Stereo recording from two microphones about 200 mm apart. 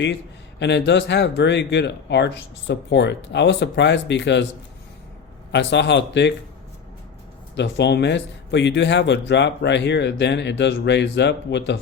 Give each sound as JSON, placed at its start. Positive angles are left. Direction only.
{"t": 0.6, "sound": "speech", "side_deg": 60}
{"t": 5.5, "sound": "speech", "side_deg": 60}
{"t": 7.5, "sound": "speech", "side_deg": 60}